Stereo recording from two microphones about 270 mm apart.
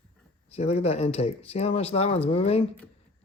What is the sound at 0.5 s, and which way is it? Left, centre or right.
Speech, left.